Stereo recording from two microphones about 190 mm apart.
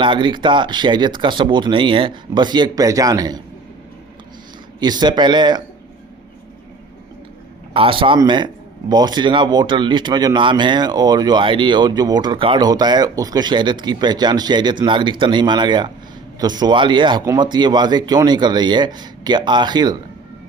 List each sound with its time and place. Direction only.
0.0 s speech: 25° right (ahead or behind)
4.8 s speech: 20° right (ahead or behind)
7.7 s speech: 30° right (ahead or behind)